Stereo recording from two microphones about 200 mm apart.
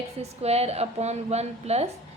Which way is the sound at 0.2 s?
30° right (ahead or behind).